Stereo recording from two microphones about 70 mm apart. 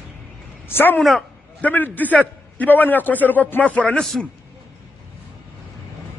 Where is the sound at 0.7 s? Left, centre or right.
Left.